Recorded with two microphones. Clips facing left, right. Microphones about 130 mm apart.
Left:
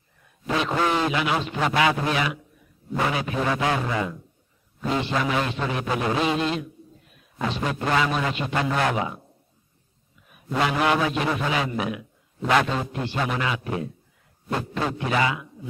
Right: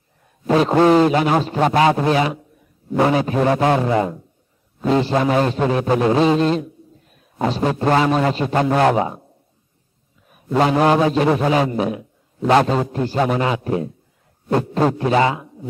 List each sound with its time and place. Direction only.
0.5 s a man's voice: 40° right (ahead or behind)
10.6 s a man's voice: 35° right (ahead or behind)